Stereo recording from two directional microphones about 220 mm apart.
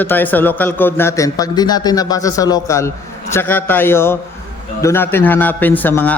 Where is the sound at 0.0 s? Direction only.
10° left (ahead or behind).